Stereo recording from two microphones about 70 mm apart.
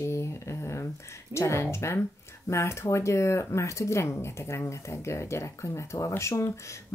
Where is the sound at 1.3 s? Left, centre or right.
Left.